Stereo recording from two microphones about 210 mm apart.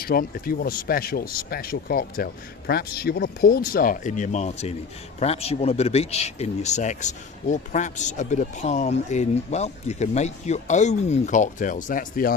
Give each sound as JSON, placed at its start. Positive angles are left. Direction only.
{"t": 0.0, "sound": "speech", "side_deg": 45}